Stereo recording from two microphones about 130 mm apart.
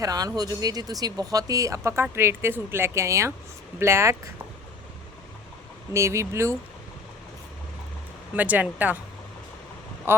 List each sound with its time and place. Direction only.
0.0 s speech: 30° right (ahead or behind)
5.9 s speech: 20° right (ahead or behind)
8.4 s speech: 10° right (ahead or behind)
10.1 s speech: 15° right (ahead or behind)